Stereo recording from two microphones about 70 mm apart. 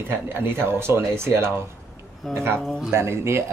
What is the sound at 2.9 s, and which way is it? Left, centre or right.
Speech, right.